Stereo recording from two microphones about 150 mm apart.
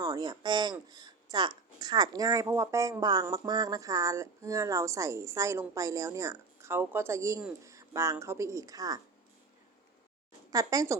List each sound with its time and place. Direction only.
0.0 s speech: 30° right (ahead or behind)
10.5 s speech: 25° right (ahead or behind)